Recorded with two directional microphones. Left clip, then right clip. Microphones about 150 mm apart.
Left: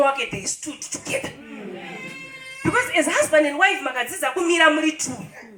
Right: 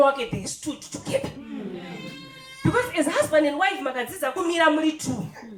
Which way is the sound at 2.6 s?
25° right (ahead or behind).